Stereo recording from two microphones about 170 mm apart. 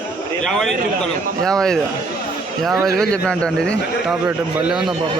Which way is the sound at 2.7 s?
20° right (ahead or behind).